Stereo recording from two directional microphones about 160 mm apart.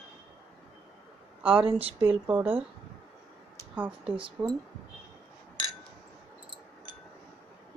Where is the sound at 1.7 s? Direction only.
40° right (ahead or behind).